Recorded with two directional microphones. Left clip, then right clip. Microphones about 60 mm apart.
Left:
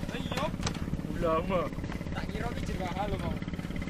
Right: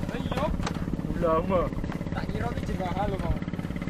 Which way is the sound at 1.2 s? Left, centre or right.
Left.